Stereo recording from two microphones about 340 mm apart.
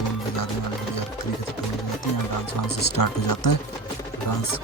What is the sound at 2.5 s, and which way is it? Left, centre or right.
Speech, left.